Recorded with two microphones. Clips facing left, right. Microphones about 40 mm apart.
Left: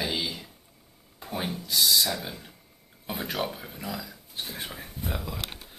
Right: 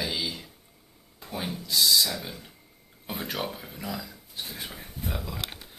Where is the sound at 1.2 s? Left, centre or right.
Centre.